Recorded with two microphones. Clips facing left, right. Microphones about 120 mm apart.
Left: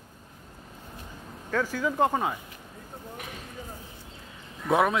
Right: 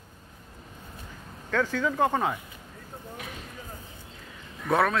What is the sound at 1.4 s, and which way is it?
Speech, 10° left (ahead or behind).